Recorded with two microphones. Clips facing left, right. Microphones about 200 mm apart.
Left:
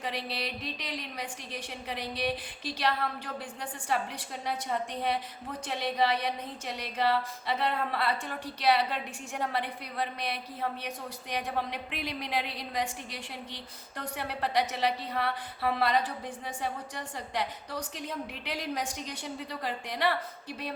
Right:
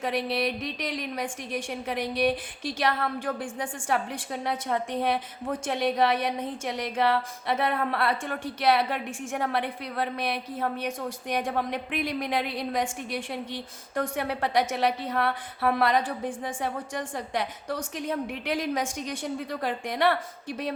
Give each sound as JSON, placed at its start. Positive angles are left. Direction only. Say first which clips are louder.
{"t": 0.0, "sound": "a woman's voice", "louder": "right 8 dB", "side_deg": -55}